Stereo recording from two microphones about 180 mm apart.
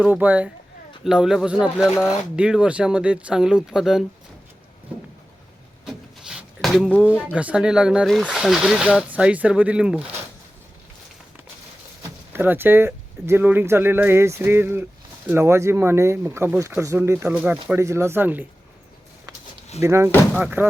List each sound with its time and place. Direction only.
0.0 s speech: 10° right (ahead or behind)
5.8 s a sound: 5° right (ahead or behind)
7.3 s speech: 5° right (ahead or behind)
12.3 s speech: 10° right (ahead or behind)
19.8 s speech: 15° right (ahead or behind)